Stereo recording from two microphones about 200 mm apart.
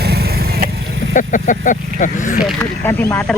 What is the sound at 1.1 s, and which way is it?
Speech, 40° left (ahead or behind).